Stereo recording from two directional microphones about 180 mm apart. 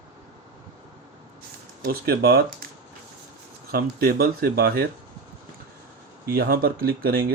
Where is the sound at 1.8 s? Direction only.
55° right (ahead or behind).